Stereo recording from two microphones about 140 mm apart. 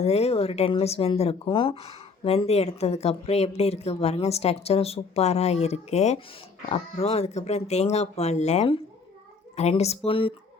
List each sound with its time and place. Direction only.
0.0 s speech: 50° left (ahead or behind)